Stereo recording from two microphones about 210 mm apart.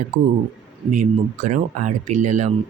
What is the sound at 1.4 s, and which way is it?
Speech, 35° right (ahead or behind).